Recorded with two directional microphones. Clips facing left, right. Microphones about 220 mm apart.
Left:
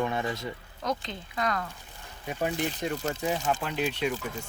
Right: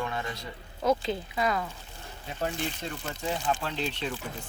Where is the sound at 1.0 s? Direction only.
5° right (ahead or behind).